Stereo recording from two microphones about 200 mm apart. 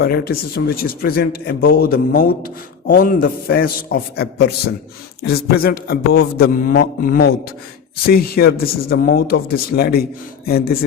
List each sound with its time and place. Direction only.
0.0 s speech: 50° left (ahead or behind)